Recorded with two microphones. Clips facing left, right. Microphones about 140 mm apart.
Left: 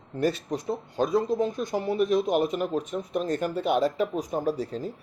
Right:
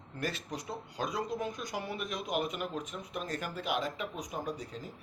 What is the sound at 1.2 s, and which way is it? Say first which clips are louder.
Speech: left 10 dB; 30° left (ahead or behind).